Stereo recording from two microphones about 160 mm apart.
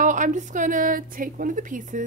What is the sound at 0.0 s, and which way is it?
A woman's voice, 55° right (ahead or behind).